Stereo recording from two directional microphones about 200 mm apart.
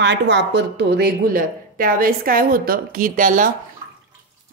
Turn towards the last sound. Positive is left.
turn(degrees=-40)  # may be behind; listen again after turning